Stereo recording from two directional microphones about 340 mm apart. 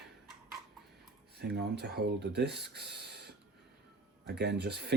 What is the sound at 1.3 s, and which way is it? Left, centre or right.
Speech, right.